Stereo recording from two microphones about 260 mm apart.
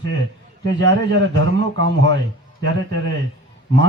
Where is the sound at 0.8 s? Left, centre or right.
Right.